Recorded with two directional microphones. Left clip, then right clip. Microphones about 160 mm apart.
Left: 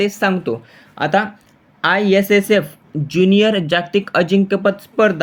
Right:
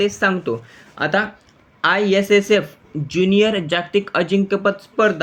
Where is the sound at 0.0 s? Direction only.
15° left (ahead or behind).